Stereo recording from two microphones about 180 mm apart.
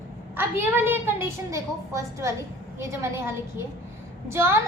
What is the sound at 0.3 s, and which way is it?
A woman's voice, 10° right (ahead or behind).